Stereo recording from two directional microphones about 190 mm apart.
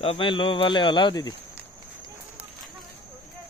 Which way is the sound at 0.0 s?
30° left (ahead or behind).